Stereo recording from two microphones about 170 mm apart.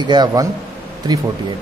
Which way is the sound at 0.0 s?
25° right (ahead or behind).